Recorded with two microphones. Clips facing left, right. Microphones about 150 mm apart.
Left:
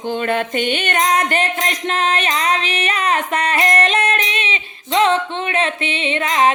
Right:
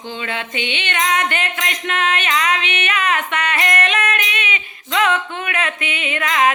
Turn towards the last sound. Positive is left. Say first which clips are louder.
# left 2 dB
turn(degrees=30)  # may be behind; listen again after turning